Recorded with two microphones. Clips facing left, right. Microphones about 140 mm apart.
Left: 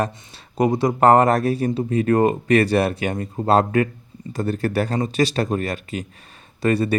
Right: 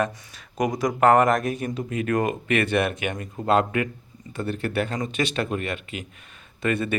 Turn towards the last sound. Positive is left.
turn(degrees=35)  # may be behind; listen again after turning